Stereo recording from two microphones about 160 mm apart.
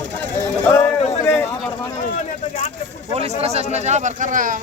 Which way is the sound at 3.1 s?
40° right (ahead or behind).